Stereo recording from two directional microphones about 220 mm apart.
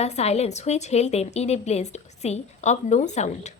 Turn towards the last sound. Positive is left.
turn(degrees=30)  # may be behind; listen again after turning